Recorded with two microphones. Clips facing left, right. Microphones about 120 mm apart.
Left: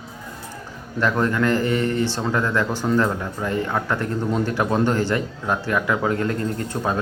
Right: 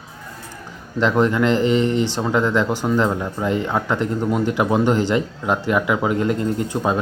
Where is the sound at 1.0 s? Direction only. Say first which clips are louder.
Right 3 dB; 20° right (ahead or behind).